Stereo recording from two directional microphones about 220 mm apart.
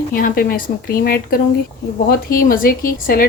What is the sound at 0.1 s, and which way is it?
A woman's voice, 40° left (ahead or behind).